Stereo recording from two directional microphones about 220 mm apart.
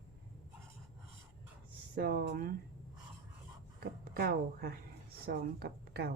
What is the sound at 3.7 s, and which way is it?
A woman's voice, 40° right (ahead or behind).